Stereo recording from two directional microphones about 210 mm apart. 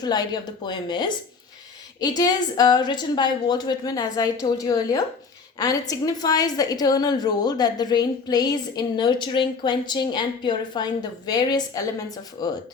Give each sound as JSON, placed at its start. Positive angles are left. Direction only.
{"t": 0.0, "sound": "a woman's voice", "side_deg": 20}